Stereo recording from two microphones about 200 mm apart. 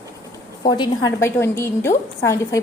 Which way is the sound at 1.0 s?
10° left (ahead or behind).